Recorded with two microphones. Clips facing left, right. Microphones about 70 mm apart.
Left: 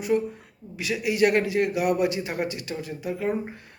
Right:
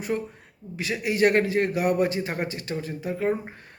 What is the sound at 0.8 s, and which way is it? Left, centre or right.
A man's voice, right.